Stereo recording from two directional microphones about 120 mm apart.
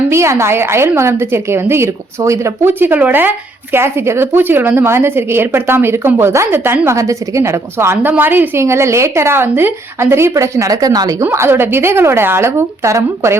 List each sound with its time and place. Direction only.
0.1 s a woman's voice: 20° right (ahead or behind)
11.3 s a woman's voice: 20° right (ahead or behind)